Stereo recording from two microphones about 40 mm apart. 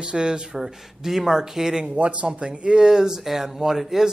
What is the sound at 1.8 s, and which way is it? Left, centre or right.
Speech, right.